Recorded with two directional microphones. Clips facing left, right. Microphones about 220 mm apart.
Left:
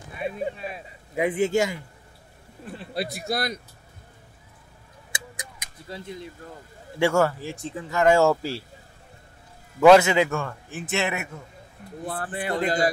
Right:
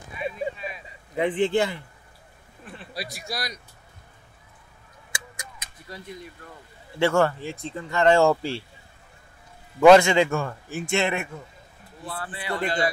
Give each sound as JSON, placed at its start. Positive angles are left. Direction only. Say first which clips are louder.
{"t": 0.2, "sound": "speech", "louder": "left 1 dB", "side_deg": 55}
{"t": 1.1, "sound": "speech", "louder": "even", "side_deg": 10}
{"t": 2.9, "sound": "a man's voice", "louder": "left 7 dB", "side_deg": 55}
{"t": 5.3, "sound": "tick-tock", "louder": "left 2 dB", "side_deg": 15}
{"t": 7.0, "sound": "speech", "louder": "even", "side_deg": 10}
{"t": 9.8, "sound": "speech", "louder": "right 1 dB", "side_deg": 5}
{"t": 12.1, "sound": "speech", "louder": "left 3 dB", "side_deg": 50}